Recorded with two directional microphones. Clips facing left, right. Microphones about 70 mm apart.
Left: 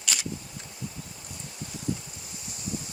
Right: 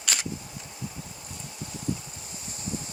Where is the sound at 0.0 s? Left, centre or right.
Right.